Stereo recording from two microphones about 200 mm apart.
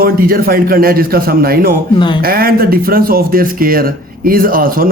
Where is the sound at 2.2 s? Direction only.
50° right (ahead or behind).